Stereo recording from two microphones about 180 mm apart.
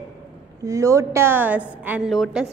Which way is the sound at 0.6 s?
15° right (ahead or behind).